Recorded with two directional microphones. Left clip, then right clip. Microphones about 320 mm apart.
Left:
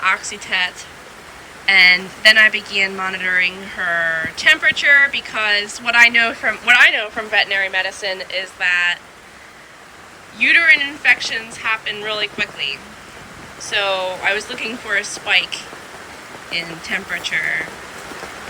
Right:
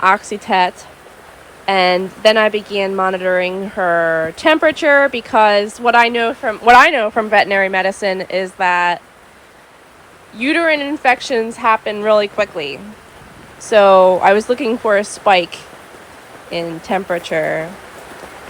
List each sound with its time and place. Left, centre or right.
0.0 s speech: centre
10.3 s speech: centre